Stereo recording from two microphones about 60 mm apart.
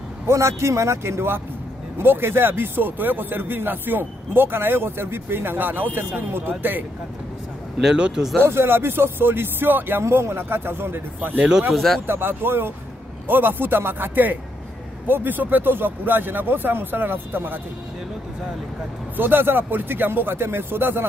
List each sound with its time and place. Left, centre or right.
0.3 s speech: right
7.8 s speech: centre
8.4 s speech: right
11.7 s speech: centre
12.1 s speech: right
19.1 s speech: right